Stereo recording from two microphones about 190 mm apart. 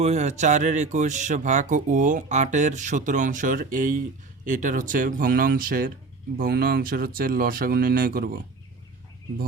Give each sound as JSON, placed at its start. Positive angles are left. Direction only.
{"t": 0.0, "sound": "speech", "side_deg": -35}